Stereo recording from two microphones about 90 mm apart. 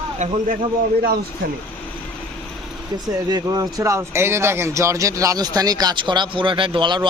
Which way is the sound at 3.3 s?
45° right (ahead or behind).